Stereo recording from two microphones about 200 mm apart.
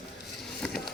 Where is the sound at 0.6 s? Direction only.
5° left (ahead or behind).